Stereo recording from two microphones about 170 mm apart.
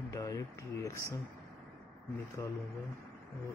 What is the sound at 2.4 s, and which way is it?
Speech, 15° left (ahead or behind).